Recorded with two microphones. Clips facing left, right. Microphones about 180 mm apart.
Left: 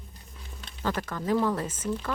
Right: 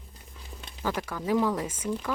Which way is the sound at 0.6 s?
10° right (ahead or behind).